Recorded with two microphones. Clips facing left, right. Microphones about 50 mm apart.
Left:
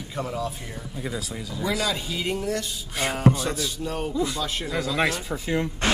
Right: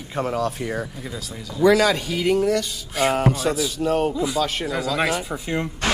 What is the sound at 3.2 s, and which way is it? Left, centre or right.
Speech, right.